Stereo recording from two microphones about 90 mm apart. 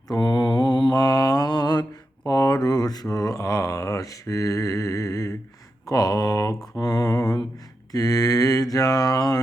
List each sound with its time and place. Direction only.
0.1 s mantra: 50° left (ahead or behind)
0.9 s mantra: 45° left (ahead or behind)
2.2 s a sound: 40° left (ahead or behind)
6.7 s mantra: 45° left (ahead or behind)